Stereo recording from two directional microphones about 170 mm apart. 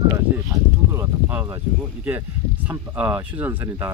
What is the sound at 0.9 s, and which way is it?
Speech, 10° right (ahead or behind).